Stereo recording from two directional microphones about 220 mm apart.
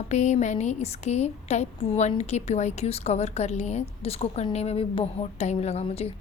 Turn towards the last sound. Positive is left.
turn(degrees=30)  # may be behind; listen again after turning